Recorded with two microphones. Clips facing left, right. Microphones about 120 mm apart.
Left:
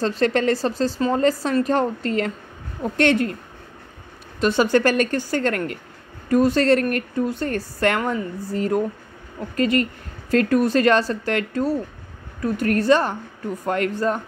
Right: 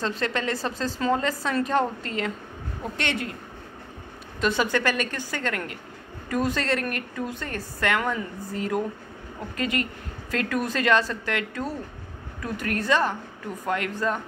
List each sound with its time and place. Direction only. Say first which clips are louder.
0.0 s a woman's voice: left 8 dB; 40° left (ahead or behind)
2.0 s a woman's voice: left 6 dB; 50° left (ahead or behind)
4.4 s a woman's voice: left 6 dB; 35° left (ahead or behind)
6.2 s a woman's voice: left 9 dB; 35° left (ahead or behind)